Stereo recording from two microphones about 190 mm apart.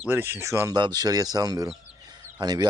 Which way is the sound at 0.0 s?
10° right (ahead or behind).